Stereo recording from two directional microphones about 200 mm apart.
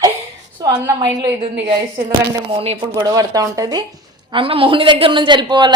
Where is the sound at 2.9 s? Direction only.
15° right (ahead or behind).